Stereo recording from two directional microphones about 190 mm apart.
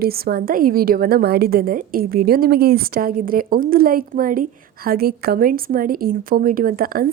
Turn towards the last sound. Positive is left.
turn(degrees=-50)  # may be behind; listen again after turning